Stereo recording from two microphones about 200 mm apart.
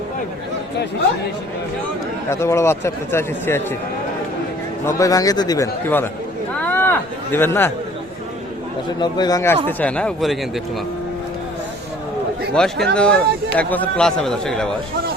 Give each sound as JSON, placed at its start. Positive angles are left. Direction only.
{"t": 2.3, "sound": "a man's voice", "side_deg": 15}
{"t": 4.9, "sound": "a man's voice", "side_deg": 15}
{"t": 6.6, "sound": "a sound", "side_deg": 10}
{"t": 9.0, "sound": "a man's voice", "side_deg": 20}
{"t": 12.8, "sound": "a man's voice", "side_deg": 5}